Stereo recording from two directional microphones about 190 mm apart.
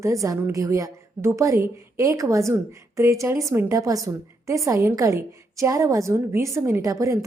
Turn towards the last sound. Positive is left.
turn(degrees=-15)  # may be behind; listen again after turning